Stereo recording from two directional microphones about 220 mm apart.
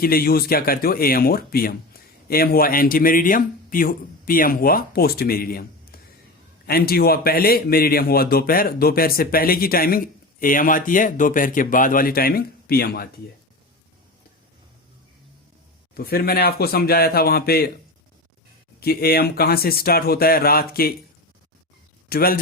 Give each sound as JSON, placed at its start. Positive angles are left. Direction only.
{"t": 0.0, "sound": "speech", "side_deg": 45}
{"t": 16.0, "sound": "speech", "side_deg": 45}
{"t": 18.8, "sound": "speech", "side_deg": 45}
{"t": 22.1, "sound": "speech", "side_deg": 45}